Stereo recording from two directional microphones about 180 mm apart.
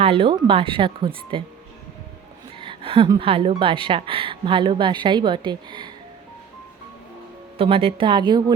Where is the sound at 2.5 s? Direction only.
30° right (ahead or behind).